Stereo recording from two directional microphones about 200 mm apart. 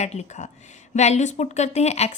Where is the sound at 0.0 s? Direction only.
35° left (ahead or behind).